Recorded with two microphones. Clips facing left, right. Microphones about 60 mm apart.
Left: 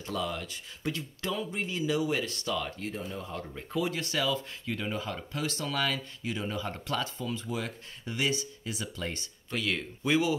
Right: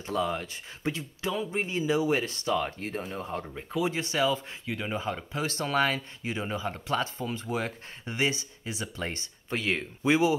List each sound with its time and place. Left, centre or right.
0.0 s speech: right
0.9 s speech: centre
1.5 s speech: right
3.8 s speech: centre
5.5 s speech: right